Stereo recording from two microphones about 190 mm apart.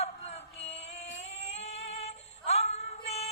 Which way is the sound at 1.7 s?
35° left (ahead or behind).